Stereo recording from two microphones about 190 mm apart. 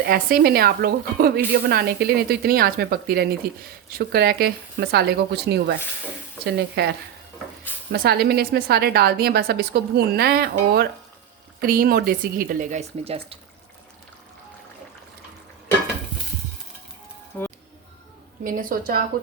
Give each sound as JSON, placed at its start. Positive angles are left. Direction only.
{"t": 0.0, "sound": "a woman's voice", "side_deg": -50}
{"t": 17.3, "sound": "speech", "side_deg": 15}
{"t": 18.4, "sound": "speech", "side_deg": -45}